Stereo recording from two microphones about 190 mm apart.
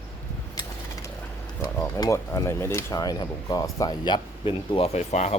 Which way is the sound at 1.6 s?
20° left (ahead or behind).